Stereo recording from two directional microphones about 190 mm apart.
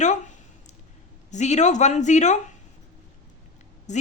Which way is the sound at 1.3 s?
35° left (ahead or behind).